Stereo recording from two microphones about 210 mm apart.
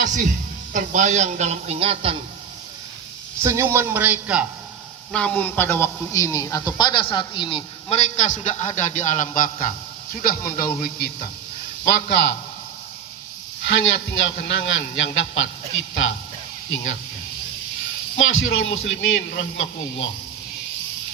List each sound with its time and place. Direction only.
0.0 s a sound: 35° right (ahead or behind)
0.7 s a man's voice: 35° right (ahead or behind)
3.4 s a man's voice: 15° right (ahead or behind)
5.1 s a man's voice: 5° left (ahead or behind); by 12.3 s 55° left (ahead or behind)
13.7 s a man's voice: 60° left (ahead or behind)
18.2 s a man's voice: 65° left (ahead or behind)